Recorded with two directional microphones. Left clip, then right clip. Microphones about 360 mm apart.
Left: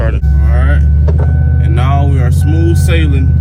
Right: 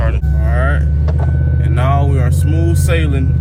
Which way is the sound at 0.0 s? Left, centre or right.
Centre.